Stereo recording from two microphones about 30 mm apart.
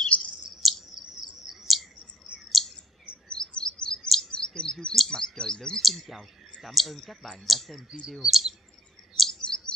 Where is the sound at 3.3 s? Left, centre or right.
Left.